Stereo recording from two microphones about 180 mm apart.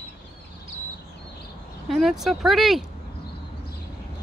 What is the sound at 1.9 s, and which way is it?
Speech, centre (ahead or behind).